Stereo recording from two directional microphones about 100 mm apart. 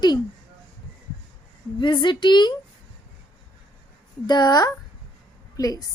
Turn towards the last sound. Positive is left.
turn(degrees=40)  # may be behind; listen again after turning